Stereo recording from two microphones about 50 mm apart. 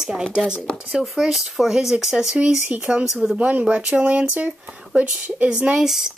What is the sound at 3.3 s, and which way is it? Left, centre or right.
Speech, right.